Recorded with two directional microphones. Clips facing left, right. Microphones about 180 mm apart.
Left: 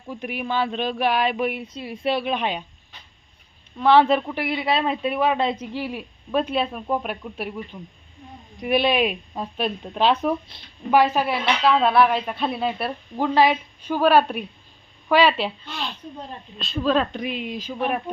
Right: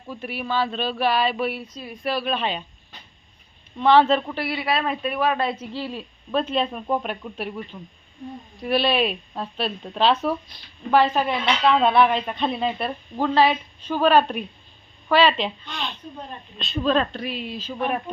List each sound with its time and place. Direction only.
0.1 s speech: 15° left (ahead or behind)
1.7 s a woman's voice: 25° left (ahead or behind)
3.8 s speech: 10° left (ahead or behind)
10.5 s a woman's voice: 25° left (ahead or behind)
10.9 s speech: 10° left (ahead or behind)